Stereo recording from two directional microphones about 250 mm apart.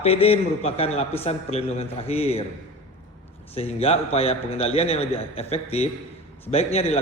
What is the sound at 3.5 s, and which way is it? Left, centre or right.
A man's voice, left.